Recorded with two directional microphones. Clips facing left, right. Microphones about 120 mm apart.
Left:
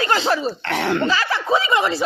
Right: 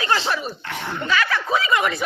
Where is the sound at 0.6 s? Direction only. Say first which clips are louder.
Left 9 dB; 80° left.